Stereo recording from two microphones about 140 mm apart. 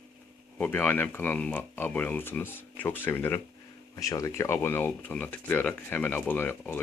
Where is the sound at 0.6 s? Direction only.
15° left (ahead or behind).